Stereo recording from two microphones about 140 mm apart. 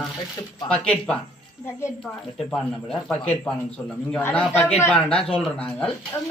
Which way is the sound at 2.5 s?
5° left (ahead or behind).